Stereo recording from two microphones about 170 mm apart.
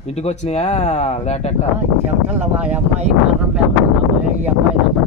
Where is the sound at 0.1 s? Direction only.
40° left (ahead or behind).